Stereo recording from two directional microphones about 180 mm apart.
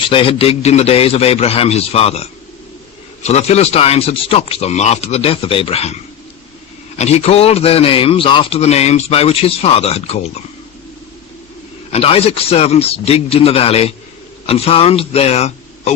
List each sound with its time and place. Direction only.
0.1 s a man's voice: 30° left (ahead or behind)
3.2 s a man's voice: 35° left (ahead or behind)
7.0 s a man's voice: 35° left (ahead or behind)
11.9 s a man's voice: 35° left (ahead or behind)